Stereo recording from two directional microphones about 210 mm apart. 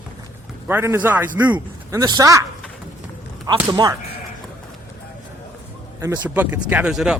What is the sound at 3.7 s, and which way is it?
Speech, 20° right (ahead or behind).